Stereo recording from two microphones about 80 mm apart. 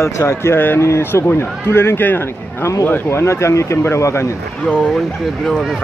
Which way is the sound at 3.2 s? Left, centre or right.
Left.